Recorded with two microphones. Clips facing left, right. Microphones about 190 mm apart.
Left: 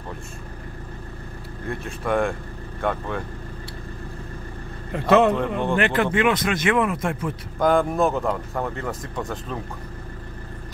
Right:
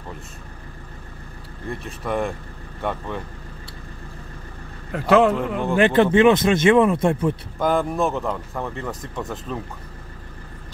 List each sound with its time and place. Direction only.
1.7 s speech: centre (ahead or behind)
4.9 s speech: 5° right (ahead or behind)
6.1 s speech: 25° right (ahead or behind)
7.5 s speech: 5° right (ahead or behind)